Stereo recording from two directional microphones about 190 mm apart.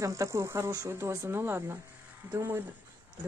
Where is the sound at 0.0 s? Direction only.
15° right (ahead or behind).